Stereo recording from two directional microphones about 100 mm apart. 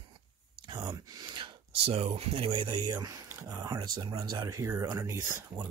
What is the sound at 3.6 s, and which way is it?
Speech, 40° right (ahead or behind).